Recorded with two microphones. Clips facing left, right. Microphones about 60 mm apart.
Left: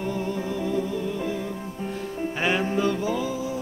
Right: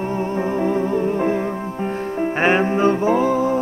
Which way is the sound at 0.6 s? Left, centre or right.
Right.